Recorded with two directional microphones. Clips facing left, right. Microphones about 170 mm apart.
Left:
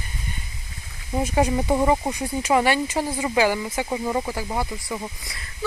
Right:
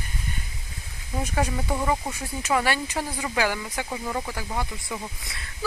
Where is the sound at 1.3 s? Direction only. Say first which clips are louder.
Left 6 dB; 20° left (ahead or behind).